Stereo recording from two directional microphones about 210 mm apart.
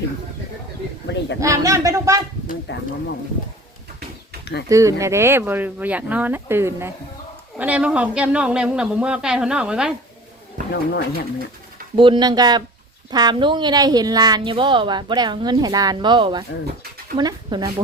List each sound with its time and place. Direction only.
1.4 s speech: 15° right (ahead or behind)
2.7 s speech: 55° left (ahead or behind)
4.7 s a woman's voice: 15° right (ahead or behind)
10.7 s speech: 50° left (ahead or behind)
11.9 s a woman's voice: 25° right (ahead or behind)